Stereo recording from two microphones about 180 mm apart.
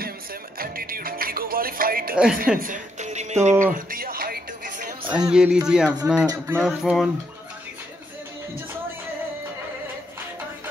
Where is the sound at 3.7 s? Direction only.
50° right (ahead or behind).